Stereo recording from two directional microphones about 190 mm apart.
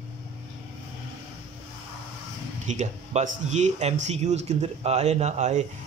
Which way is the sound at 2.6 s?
40° right (ahead or behind).